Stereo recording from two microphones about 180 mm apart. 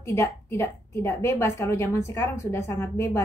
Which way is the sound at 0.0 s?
15° left (ahead or behind).